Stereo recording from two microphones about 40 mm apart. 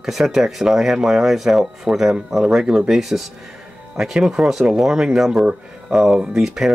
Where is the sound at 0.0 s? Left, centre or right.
Centre.